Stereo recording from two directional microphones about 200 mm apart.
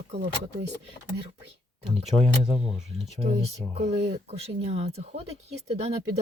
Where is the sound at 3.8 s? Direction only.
30° right (ahead or behind).